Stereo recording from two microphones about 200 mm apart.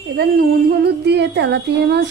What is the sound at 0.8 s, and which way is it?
Female singing, 55° right (ahead or behind).